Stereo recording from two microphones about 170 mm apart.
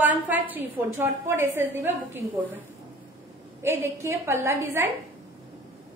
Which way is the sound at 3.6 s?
15° right (ahead or behind).